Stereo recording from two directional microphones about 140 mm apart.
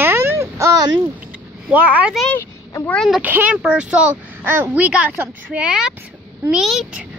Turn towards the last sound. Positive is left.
turn(degrees=0)  # may be behind; listen again after turning